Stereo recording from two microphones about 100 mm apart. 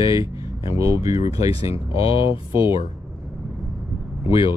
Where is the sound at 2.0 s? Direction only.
65° left (ahead or behind).